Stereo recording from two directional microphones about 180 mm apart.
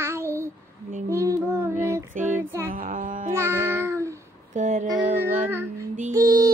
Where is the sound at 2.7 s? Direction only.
50° right (ahead or behind).